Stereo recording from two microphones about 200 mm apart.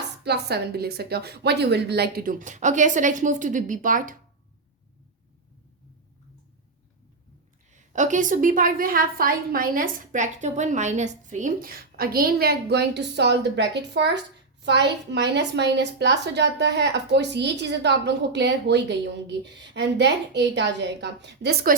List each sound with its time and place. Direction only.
0.3 s a woman's voice: 55° right (ahead or behind)
7.7 s a woman's voice: 35° right (ahead or behind)